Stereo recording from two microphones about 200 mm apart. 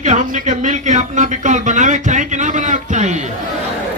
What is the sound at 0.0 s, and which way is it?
Speech, 40° right (ahead or behind).